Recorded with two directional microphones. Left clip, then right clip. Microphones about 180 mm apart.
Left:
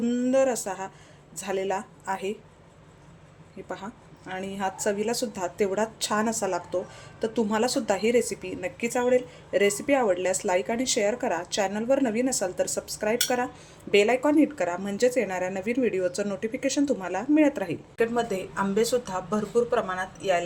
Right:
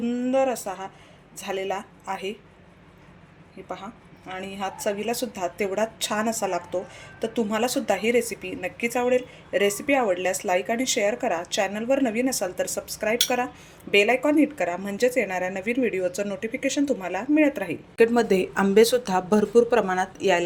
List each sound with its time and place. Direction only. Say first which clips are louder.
0.0 s a woman's voice: even; 10° left (ahead or behind)
4.3 s a woman's voice: left 1 dB; 5° left (ahead or behind)
17.9 s speech: right 7 dB; 40° right (ahead or behind)